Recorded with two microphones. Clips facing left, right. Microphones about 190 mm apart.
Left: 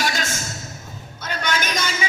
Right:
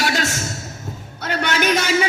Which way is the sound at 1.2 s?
70° right (ahead or behind).